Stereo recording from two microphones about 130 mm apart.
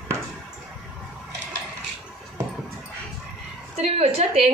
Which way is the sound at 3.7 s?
55° right (ahead or behind).